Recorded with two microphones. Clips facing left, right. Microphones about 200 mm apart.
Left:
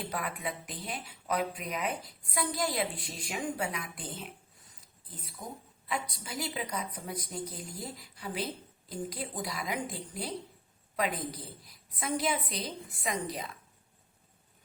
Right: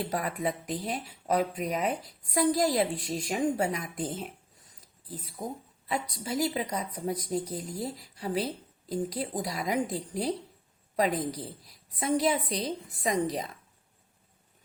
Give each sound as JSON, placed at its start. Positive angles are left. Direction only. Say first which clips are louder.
{"t": 0.0, "sound": "speech", "louder": "right 6 dB", "side_deg": -40}
{"t": 5.9, "sound": "speech", "louder": "right 5 dB", "side_deg": -40}